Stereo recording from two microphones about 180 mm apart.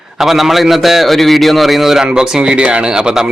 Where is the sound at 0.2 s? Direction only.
Centre (ahead or behind).